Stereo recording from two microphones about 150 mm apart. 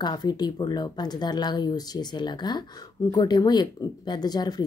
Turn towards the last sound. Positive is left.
turn(degrees=25)  # may be behind; listen again after turning